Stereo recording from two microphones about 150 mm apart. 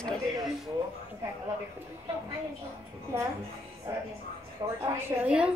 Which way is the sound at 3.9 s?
20° right (ahead or behind).